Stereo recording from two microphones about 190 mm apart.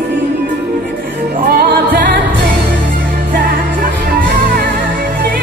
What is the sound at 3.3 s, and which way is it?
Music, 50° right (ahead or behind).